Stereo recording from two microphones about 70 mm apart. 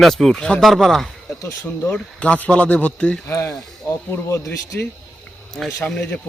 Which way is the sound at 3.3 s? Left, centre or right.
Left.